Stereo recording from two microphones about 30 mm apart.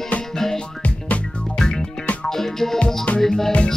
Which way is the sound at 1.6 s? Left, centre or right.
Left.